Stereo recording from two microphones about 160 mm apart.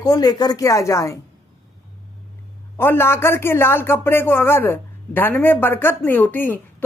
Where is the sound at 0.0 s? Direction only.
20° left (ahead or behind).